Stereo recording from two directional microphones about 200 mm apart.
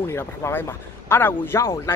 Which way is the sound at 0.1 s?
10° left (ahead or behind).